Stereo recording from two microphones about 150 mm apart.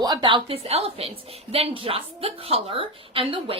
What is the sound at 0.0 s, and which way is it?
A woman's voice, 30° right (ahead or behind).